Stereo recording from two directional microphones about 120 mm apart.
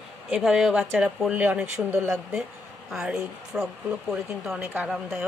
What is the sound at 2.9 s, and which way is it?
A woman's voice, 5° right (ahead or behind).